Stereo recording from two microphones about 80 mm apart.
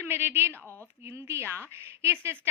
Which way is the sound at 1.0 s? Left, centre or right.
Right.